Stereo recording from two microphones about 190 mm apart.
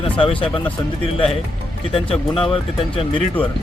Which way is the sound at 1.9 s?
30° left (ahead or behind).